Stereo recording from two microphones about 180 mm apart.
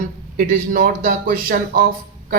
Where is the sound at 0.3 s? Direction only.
50° right (ahead or behind).